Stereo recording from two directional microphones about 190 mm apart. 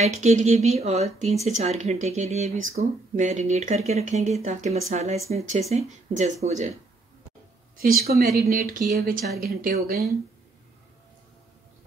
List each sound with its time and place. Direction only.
0.0 s speech: 35° right (ahead or behind)
7.7 s speech: 50° right (ahead or behind)